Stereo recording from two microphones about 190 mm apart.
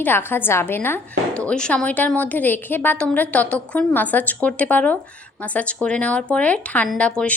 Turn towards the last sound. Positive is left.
turn(degrees=5)  # may be behind; listen again after turning